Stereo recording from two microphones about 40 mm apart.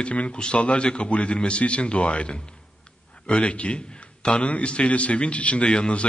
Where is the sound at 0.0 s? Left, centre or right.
Left.